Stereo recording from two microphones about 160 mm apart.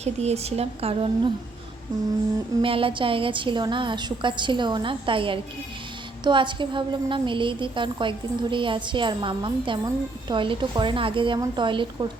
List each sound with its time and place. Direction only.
0.0 s a woman's voice: 40° right (ahead or behind)
2.6 s a woman's voice: 35° right (ahead or behind)